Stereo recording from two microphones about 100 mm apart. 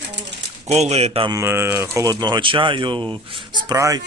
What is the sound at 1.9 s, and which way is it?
Speech, 40° right (ahead or behind).